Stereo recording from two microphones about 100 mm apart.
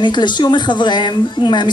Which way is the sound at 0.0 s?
50° left (ahead or behind).